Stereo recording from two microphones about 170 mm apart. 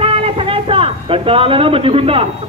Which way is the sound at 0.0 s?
35° right (ahead or behind).